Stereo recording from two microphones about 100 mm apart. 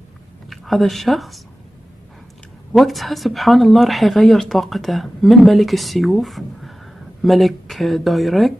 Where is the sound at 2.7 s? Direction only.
Centre (ahead or behind).